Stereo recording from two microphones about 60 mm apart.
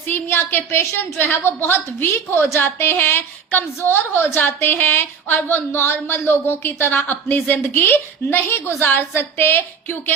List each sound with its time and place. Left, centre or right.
0.1 s a woman's voice: left